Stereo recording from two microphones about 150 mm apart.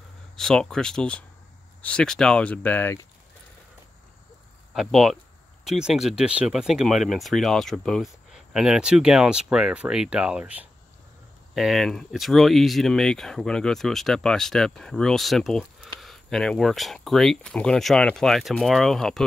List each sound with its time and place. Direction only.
0.4 s speech: 5° left (ahead or behind)
4.7 s speech: centre (ahead or behind)